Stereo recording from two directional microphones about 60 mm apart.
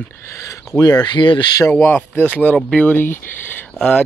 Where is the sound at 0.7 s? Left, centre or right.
Left.